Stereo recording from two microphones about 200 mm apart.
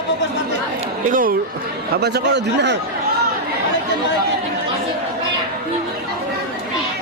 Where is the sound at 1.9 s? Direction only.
55° right (ahead or behind).